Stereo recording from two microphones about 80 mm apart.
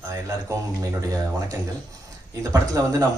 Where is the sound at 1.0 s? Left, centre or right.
Right.